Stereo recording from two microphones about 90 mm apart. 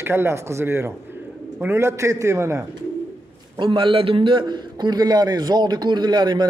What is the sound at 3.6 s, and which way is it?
A man's voice, 65° right (ahead or behind).